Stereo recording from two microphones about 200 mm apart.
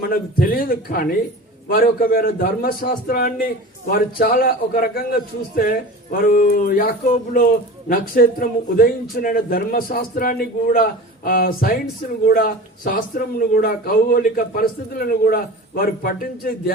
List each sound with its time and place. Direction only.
0.0 s speech: 45° left (ahead or behind)